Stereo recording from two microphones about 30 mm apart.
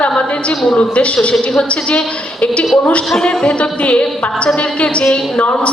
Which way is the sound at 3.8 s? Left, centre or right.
Left.